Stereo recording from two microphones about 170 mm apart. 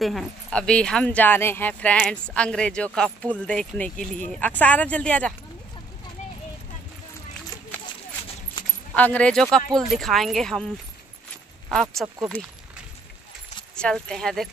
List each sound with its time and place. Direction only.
0.0 s speech: centre (ahead or behind)
8.9 s speech: 10° left (ahead or behind)
11.7 s speech: centre (ahead or behind)
13.7 s speech: 5° left (ahead or behind)